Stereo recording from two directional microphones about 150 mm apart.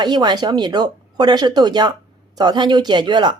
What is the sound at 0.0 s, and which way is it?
Speech, 30° right (ahead or behind).